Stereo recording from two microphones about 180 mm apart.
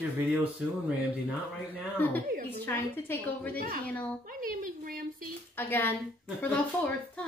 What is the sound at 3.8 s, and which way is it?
Speech, 10° left (ahead or behind).